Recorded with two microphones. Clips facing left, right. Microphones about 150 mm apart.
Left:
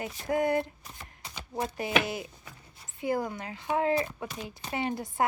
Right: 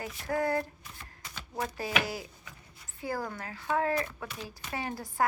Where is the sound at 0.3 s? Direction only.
20° left (ahead or behind).